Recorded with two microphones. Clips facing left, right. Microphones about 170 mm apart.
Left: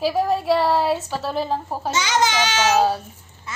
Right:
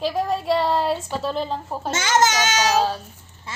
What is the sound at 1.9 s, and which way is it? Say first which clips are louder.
Speech: right 1 dB; 50° right (ahead or behind).